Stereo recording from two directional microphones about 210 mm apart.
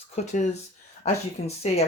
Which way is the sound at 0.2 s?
30° left (ahead or behind).